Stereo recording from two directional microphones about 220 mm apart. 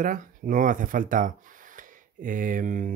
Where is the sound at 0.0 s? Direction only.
35° right (ahead or behind).